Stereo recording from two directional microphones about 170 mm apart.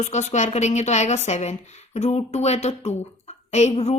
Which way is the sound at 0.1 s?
45° left (ahead or behind).